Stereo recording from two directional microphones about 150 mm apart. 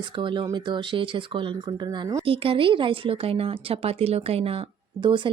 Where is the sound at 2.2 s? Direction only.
40° right (ahead or behind).